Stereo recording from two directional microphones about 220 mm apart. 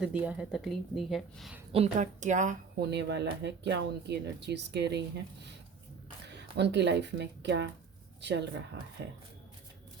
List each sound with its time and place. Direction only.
0.0 s a woman's voice: 5° right (ahead or behind)
1.7 s a woman's voice: 30° right (ahead or behind)
2.9 s speech: 50° right (ahead or behind)